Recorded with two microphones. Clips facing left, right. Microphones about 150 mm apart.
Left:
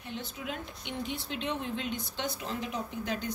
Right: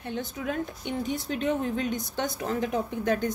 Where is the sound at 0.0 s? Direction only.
55° right (ahead or behind).